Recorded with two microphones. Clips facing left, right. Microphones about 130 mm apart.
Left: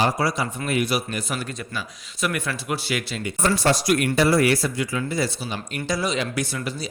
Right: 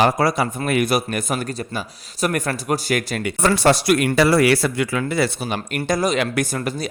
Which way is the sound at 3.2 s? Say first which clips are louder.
Right 2 dB; 70° right (ahead or behind).